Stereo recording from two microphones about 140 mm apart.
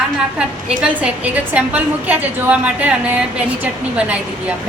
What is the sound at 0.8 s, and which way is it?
A woman's voice, 10° right (ahead or behind).